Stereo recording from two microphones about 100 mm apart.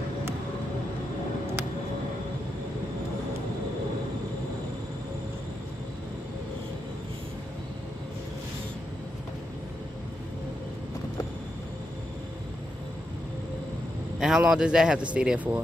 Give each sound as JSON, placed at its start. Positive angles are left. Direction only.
{"t": 14.2, "sound": "speech", "side_deg": -5}